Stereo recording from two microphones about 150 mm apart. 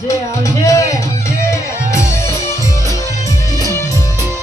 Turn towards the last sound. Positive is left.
turn(degrees=25)  # may be behind; listen again after turning